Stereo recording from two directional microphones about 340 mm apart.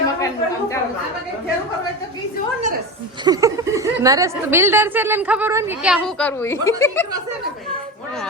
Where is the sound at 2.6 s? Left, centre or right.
Right.